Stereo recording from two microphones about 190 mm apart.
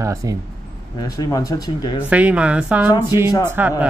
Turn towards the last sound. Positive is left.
turn(degrees=-10)  # may be behind; listen again after turning